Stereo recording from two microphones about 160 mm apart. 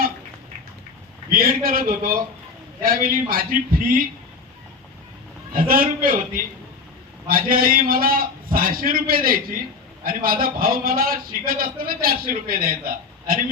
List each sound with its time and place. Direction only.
1.3 s a man's voice: 65° right (ahead or behind)
5.5 s a man's voice: 65° right (ahead or behind)